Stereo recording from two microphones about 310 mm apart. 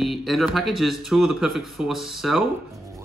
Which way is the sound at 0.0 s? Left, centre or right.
Centre.